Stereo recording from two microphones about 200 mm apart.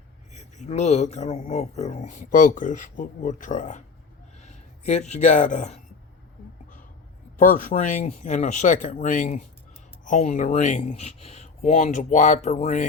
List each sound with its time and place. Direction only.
0.3 s speech: 35° left (ahead or behind)
7.3 s speech: 40° left (ahead or behind)